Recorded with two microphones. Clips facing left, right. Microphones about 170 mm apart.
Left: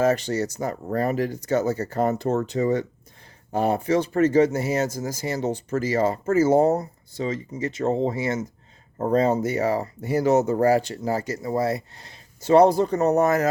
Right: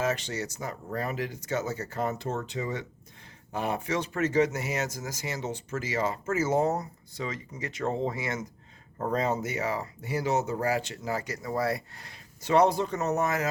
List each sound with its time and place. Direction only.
0.0 s speech: 40° left (ahead or behind)